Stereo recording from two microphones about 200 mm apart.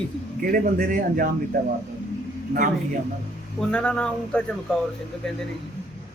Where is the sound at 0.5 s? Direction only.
45° right (ahead or behind).